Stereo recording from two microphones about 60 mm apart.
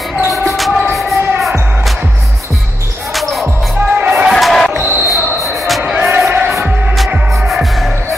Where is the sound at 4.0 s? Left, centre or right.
Right.